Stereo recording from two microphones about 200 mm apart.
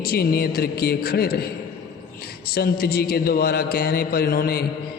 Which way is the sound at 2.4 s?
50° left (ahead or behind).